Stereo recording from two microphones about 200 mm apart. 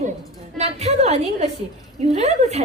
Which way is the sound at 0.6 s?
35° right (ahead or behind).